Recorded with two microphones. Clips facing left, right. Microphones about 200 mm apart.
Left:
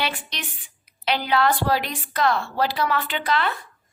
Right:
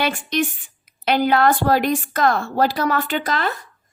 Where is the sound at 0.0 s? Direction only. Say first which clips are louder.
Right 8 dB; 50° right (ahead or behind).